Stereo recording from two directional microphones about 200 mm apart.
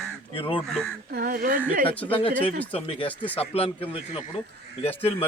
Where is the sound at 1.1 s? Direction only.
50° right (ahead or behind).